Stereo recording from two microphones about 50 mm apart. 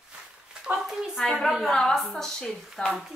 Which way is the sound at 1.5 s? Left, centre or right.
Centre.